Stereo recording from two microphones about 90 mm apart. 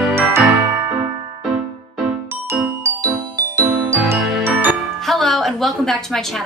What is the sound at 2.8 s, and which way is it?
Music, 40° right (ahead or behind).